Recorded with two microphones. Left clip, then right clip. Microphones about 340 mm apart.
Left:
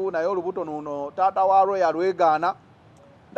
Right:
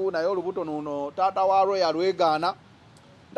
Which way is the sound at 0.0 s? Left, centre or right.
Centre.